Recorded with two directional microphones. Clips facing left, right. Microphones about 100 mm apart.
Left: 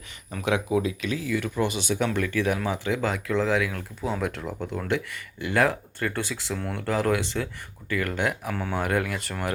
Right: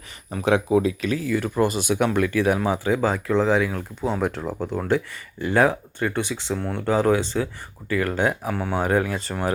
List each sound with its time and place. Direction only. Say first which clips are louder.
0.3 s speech: right 5 dB; 30° right (ahead or behind)